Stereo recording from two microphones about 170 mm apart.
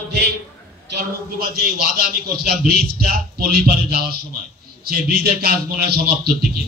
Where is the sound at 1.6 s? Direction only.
65° right (ahead or behind).